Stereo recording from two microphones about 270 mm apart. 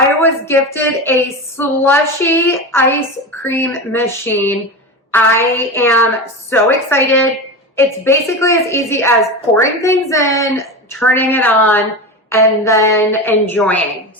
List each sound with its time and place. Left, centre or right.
0.2 s a woman's voice: centre